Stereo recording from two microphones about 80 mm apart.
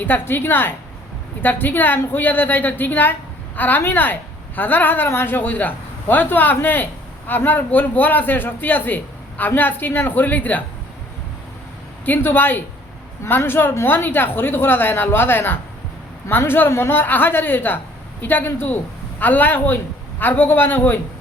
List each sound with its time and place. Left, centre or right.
0.0 s a woman's voice: left
12.0 s a woman's voice: left